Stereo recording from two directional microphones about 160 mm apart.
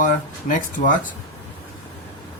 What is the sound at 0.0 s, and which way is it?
Speech, 55° left (ahead or behind).